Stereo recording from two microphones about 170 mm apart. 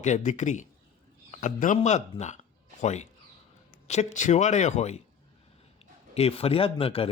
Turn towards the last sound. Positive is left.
turn(degrees=35)  # may be behind; listen again after turning